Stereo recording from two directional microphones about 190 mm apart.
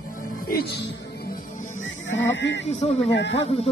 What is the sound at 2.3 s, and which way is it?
Speech, 70° left (ahead or behind).